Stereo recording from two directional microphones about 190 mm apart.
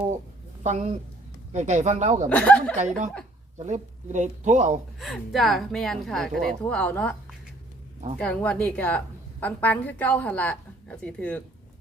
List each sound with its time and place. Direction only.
0.6 s speech: 35° right (ahead or behind)
2.3 s a woman's voice: 5° left (ahead or behind)
3.6 s speech: 40° right (ahead or behind)
4.9 s a woman's voice: centre (ahead or behind)